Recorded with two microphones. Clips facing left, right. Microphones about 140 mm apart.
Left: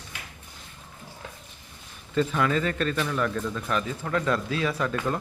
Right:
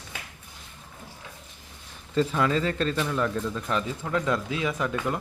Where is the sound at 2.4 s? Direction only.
25° right (ahead or behind).